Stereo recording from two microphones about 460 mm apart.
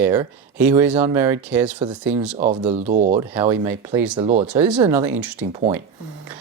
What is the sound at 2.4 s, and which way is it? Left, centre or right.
Speech, centre.